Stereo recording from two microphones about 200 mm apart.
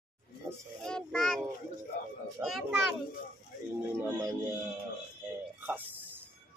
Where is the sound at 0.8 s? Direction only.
5° left (ahead or behind).